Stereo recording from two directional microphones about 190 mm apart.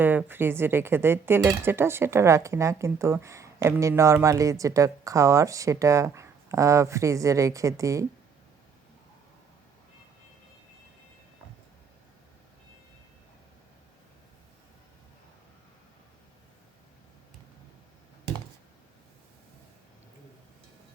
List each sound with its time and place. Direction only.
0.0 s speech: 10° right (ahead or behind)